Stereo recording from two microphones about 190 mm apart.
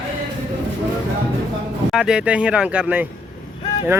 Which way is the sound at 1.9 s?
5° right (ahead or behind).